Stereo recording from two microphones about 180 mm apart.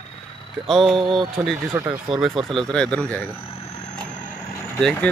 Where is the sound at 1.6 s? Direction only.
15° right (ahead or behind).